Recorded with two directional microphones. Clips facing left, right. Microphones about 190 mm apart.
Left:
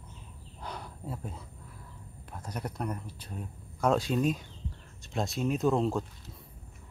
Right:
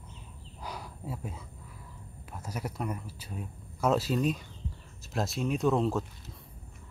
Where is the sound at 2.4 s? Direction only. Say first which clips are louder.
Even; 5° right (ahead or behind).